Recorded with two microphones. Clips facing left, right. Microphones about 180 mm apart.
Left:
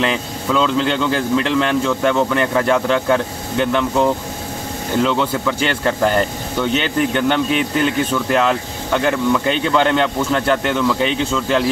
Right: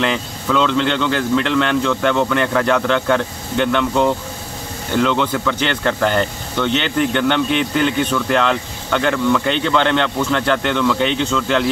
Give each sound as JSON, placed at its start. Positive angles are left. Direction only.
{"t": 0.0, "sound": "speech", "side_deg": 5}